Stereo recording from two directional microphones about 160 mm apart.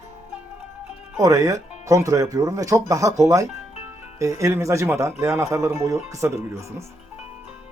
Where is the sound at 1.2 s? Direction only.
20° right (ahead or behind).